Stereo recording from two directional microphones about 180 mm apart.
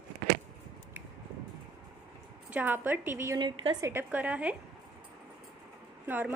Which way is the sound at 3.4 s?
25° right (ahead or behind).